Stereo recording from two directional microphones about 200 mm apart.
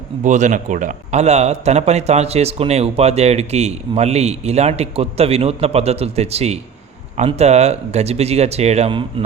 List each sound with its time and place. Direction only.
0.2 s a man's voice: 35° right (ahead or behind)